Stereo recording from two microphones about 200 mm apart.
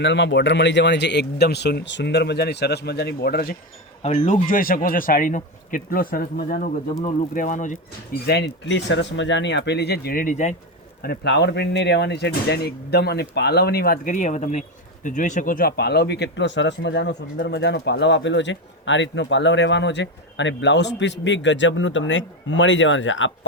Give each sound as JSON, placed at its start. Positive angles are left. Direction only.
{"t": 0.0, "sound": "speech", "side_deg": 60}
{"t": 4.0, "sound": "speech", "side_deg": 35}
{"t": 8.3, "sound": "speech", "side_deg": 60}
{"t": 11.0, "sound": "speech", "side_deg": 55}